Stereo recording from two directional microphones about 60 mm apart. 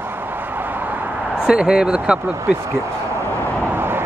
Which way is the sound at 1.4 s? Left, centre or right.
Centre.